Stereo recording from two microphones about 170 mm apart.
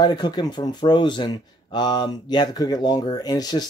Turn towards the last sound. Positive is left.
turn(degrees=25)  # may be behind; listen again after turning